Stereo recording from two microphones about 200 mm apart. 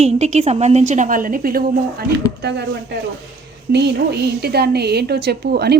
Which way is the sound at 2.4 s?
60° right (ahead or behind).